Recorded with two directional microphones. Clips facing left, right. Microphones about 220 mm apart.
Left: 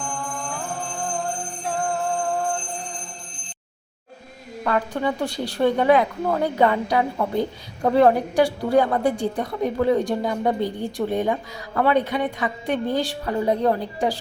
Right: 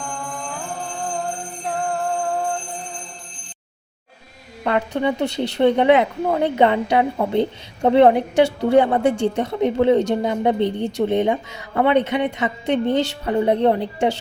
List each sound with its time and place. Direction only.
4.6 s speech: 20° right (ahead or behind)